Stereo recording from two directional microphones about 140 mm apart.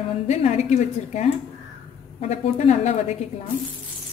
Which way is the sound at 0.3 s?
55° left (ahead or behind).